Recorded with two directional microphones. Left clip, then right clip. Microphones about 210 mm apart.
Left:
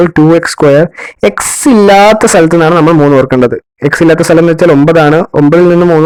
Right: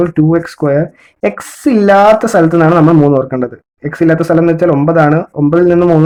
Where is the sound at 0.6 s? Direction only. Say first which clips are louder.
Left 9 dB; 50° left (ahead or behind).